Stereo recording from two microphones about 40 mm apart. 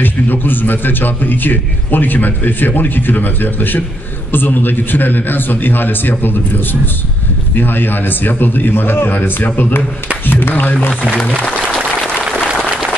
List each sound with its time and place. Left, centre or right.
0.0 s a man's voice: left
11.1 s speech: left